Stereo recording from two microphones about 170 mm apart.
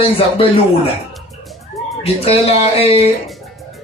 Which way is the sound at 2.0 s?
35° left (ahead or behind).